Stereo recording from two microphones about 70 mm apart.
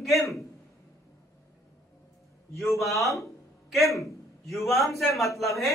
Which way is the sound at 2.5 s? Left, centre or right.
Centre.